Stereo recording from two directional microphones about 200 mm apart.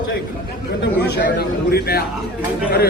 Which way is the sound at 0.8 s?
55° left (ahead or behind).